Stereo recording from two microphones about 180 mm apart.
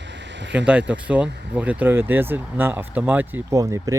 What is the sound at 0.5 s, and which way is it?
Speech, 5° right (ahead or behind).